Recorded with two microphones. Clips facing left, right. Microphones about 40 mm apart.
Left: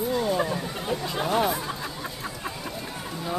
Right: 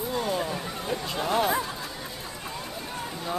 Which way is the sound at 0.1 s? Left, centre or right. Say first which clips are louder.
Left 2 dB; centre.